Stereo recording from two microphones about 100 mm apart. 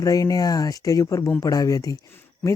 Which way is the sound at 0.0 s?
35° left (ahead or behind).